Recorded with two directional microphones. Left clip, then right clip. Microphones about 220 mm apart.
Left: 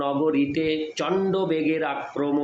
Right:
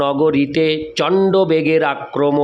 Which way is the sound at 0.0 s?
50° right (ahead or behind).